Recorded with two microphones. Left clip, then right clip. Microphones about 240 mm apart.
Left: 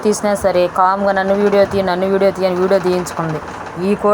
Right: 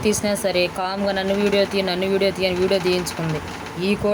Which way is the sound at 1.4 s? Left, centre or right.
Left.